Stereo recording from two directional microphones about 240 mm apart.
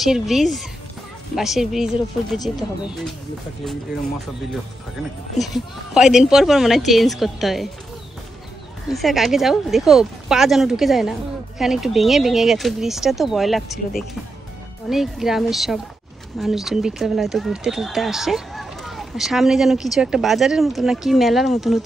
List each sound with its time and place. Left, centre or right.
0.0 s speech: centre
5.4 s speech: centre
8.9 s speech: centre